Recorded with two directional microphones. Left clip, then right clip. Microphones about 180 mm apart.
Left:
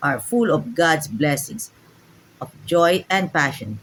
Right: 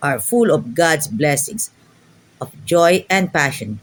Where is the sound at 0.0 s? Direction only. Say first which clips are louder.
Right 4 dB; 40° right (ahead or behind).